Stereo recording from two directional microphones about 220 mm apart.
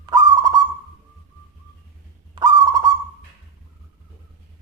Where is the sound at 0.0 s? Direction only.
20° right (ahead or behind).